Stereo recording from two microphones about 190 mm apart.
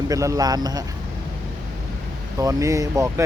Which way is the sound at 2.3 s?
15° right (ahead or behind).